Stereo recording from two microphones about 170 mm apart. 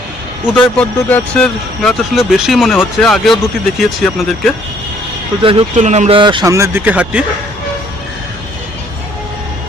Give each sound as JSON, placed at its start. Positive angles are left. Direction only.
{"t": 0.4, "sound": "speech", "side_deg": 5}
{"t": 5.4, "sound": "speech", "side_deg": -30}
{"t": 5.7, "sound": "speech", "side_deg": -45}